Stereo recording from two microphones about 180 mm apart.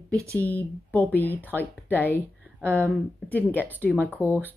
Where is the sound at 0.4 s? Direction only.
10° left (ahead or behind).